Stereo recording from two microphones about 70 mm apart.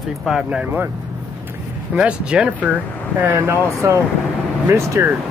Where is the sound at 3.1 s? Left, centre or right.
Right.